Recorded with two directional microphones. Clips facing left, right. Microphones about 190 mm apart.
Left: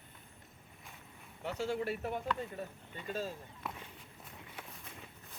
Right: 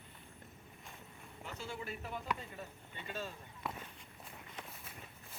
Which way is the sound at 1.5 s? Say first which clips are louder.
Left 9 dB; 80° left.